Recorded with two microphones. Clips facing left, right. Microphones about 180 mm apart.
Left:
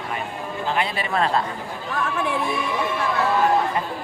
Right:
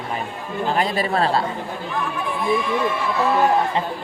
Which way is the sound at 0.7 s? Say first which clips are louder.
Right 3 dB; 40° right (ahead or behind).